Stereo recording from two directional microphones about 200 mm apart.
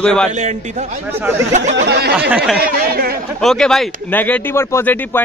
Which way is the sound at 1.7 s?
60° right (ahead or behind).